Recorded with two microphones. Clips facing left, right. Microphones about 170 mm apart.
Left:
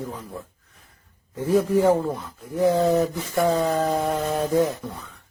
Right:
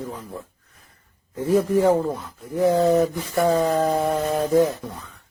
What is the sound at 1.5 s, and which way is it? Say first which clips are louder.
Speech: right 1 dB; centre (ahead or behind).